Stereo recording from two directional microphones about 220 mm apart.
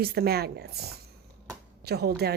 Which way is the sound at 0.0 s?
45° right (ahead or behind).